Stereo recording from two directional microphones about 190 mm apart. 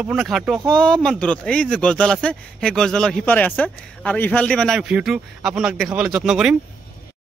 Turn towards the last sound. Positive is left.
turn(degrees=0)  # may be behind; listen again after turning